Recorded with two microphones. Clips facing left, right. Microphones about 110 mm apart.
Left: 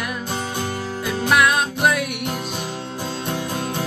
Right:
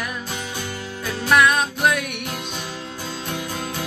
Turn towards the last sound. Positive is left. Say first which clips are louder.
# left 3 dB
turn(degrees=30)  # may be behind; listen again after turning